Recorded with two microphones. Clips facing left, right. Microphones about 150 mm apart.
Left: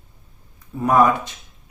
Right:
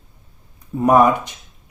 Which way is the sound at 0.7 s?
15° right (ahead or behind).